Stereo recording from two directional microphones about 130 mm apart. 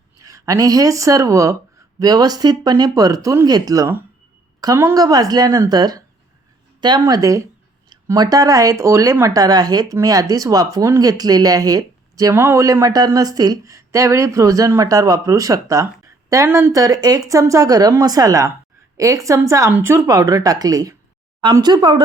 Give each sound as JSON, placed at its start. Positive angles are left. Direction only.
{"t": 0.2, "sound": "speech", "side_deg": -25}